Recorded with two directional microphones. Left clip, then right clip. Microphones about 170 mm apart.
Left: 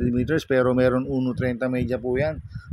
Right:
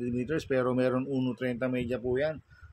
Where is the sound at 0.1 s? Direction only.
55° left (ahead or behind).